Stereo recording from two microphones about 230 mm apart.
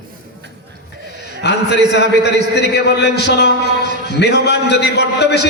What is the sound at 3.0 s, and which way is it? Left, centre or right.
A man's voice, left.